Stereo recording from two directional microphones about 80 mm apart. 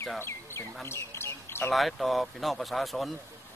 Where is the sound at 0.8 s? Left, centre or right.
Left.